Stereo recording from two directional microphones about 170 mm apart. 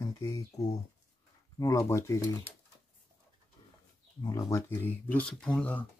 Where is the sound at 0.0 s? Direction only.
20° left (ahead or behind).